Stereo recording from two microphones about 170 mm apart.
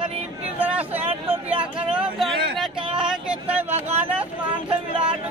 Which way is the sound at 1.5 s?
5° right (ahead or behind).